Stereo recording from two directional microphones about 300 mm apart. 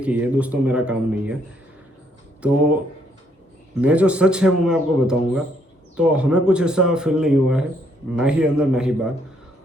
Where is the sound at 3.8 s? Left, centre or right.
Centre.